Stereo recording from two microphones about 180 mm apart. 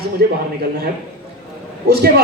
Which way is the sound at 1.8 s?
65° right (ahead or behind).